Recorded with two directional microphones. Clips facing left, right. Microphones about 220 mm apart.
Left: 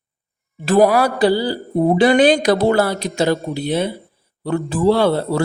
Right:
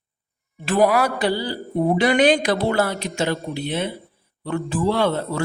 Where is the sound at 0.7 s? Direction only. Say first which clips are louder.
Left 4 dB; 40° left (ahead or behind).